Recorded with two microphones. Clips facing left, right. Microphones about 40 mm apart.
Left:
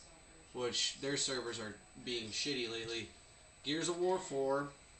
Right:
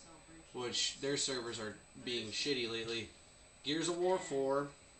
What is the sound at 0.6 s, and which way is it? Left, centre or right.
Speech, centre.